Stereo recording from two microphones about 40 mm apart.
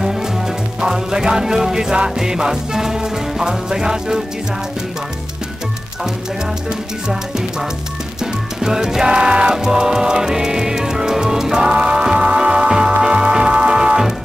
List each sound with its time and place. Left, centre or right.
0.7 s music: centre
8.6 s music: centre